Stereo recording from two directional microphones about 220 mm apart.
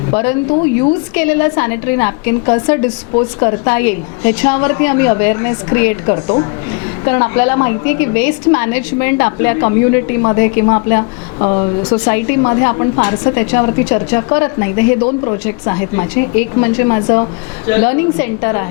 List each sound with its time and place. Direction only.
0.1 s a woman's voice: 10° left (ahead or behind)
12.0 s a woman's voice: 15° left (ahead or behind)